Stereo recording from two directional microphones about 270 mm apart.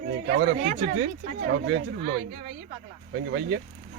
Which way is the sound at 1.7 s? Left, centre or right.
Right.